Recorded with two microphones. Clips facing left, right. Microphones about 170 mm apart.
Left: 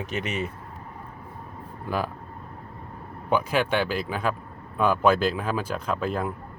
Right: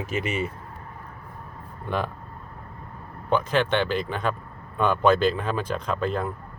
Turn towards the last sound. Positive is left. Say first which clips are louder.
# right 1 dB
turn(degrees=5)  # may be behind; listen again after turning